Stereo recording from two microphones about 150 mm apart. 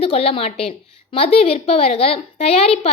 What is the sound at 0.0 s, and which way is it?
A woman's voice, 40° left (ahead or behind).